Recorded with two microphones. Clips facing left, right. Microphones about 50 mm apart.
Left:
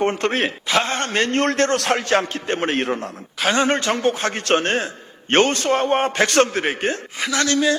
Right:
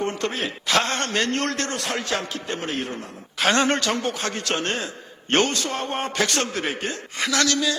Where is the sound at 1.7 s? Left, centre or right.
Left.